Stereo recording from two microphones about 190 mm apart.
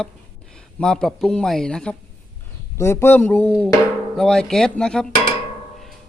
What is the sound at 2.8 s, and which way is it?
Speech, 15° left (ahead or behind).